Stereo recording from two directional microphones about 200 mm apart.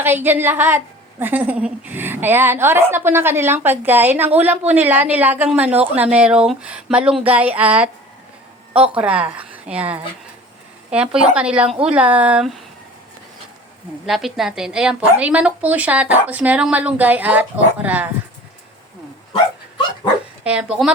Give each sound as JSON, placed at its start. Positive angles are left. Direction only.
{"t": 0.0, "sound": "a woman's voice", "side_deg": -10}
{"t": 9.0, "sound": "a woman's voice", "side_deg": -5}
{"t": 14.1, "sound": "a woman's voice", "side_deg": 0}
{"t": 20.4, "sound": "speech", "side_deg": -5}